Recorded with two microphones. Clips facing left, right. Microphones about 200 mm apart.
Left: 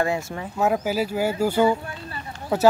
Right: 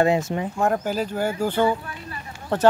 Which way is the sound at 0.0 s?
20° right (ahead or behind).